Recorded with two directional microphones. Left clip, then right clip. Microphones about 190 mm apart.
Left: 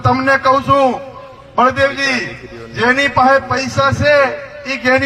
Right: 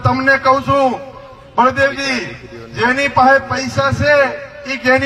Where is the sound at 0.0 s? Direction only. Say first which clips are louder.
Even; 15° right (ahead or behind).